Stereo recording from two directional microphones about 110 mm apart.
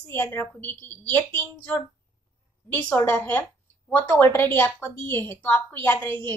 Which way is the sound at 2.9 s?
20° left (ahead or behind).